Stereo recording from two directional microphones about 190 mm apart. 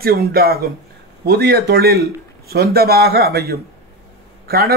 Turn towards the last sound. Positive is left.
turn(degrees=-50)  # may be behind; listen again after turning